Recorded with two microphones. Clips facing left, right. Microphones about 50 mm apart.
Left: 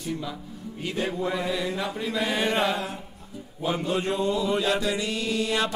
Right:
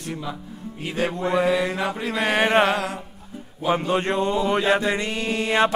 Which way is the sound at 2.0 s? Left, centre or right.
Right.